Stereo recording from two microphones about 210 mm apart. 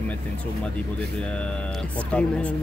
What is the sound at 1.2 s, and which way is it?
Speech, 5° left (ahead or behind).